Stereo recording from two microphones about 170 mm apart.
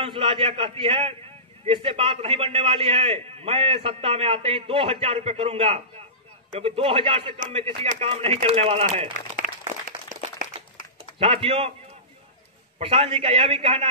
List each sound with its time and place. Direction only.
0.0 s a man's voice: 30° right (ahead or behind)
9.4 s applause: 50° right (ahead or behind)
11.1 s a man's voice: 35° right (ahead or behind)
12.7 s a man's voice: 35° right (ahead or behind)